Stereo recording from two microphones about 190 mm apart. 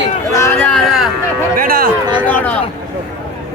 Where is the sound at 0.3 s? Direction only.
15° left (ahead or behind).